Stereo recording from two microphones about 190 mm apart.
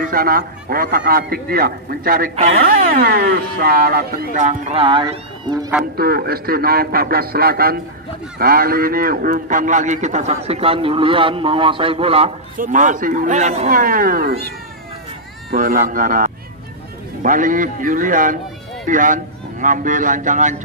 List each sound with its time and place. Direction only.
0.1 s speech: 50° right (ahead or behind); by 5.7 s 20° right (ahead or behind)
5.9 s a man's voice: 55° right (ahead or behind); by 12.3 s 30° right (ahead or behind)
12.5 s speech: 45° right (ahead or behind)
15.5 s speech: 50° right (ahead or behind)